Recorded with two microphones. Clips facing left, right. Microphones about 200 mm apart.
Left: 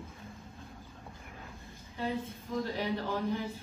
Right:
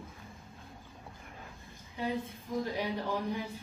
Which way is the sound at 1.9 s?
15° right (ahead or behind).